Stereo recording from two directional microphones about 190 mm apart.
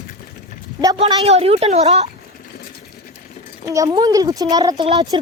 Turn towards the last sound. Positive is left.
turn(degrees=-25)  # may be behind; listen again after turning